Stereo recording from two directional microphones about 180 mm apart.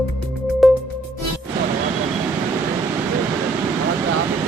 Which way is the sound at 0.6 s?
Centre (ahead or behind).